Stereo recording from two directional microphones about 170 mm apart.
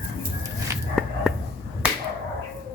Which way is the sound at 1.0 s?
Centre (ahead or behind).